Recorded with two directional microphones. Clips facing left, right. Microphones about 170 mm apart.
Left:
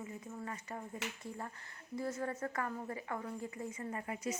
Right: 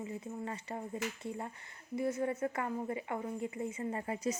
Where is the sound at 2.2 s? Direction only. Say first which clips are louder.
Right 4 dB; 20° right (ahead or behind).